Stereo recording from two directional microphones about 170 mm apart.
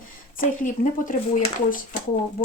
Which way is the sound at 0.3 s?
50° left (ahead or behind).